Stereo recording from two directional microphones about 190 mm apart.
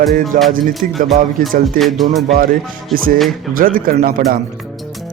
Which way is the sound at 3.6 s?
45° right (ahead or behind).